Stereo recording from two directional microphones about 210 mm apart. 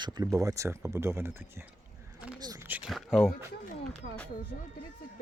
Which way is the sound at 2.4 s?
15° right (ahead or behind).